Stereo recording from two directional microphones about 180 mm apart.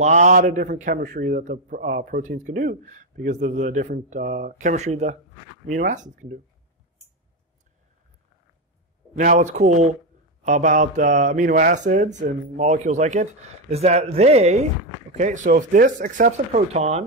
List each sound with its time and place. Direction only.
0.0 s a man's voice: 40° right (ahead or behind)
9.1 s a man's voice: 45° right (ahead or behind)